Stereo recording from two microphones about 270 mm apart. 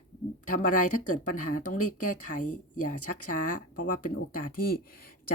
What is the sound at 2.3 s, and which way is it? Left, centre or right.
A woman's voice, left.